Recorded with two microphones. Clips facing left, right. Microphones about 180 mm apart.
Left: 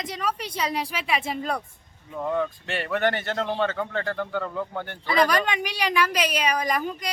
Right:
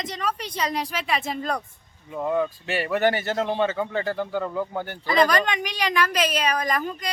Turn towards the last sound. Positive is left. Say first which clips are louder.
# even
turn(degrees=10)  # may be behind; listen again after turning